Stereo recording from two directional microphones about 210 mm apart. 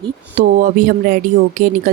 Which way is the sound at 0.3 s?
40° right (ahead or behind).